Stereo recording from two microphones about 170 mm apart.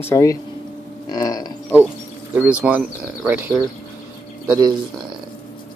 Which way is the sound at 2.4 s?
10° right (ahead or behind).